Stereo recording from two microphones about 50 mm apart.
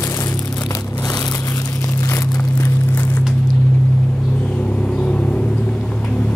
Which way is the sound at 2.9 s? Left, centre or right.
Left.